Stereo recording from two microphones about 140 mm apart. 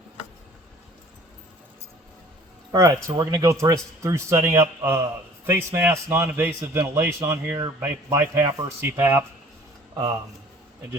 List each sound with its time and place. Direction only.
2.7 s a man's voice: 25° right (ahead or behind)